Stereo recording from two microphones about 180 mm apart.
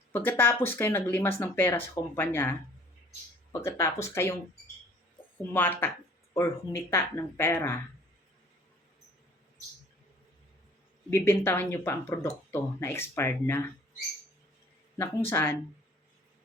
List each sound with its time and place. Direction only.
0.3 s speech: 10° left (ahead or behind)
5.4 s speech: 10° left (ahead or behind)
11.1 s speech: 15° left (ahead or behind)
15.3 s speech: 15° left (ahead or behind)